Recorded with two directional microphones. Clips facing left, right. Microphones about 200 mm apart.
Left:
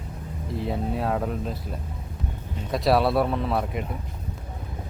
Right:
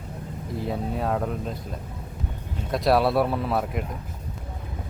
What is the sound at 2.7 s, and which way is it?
Speech, centre (ahead or behind).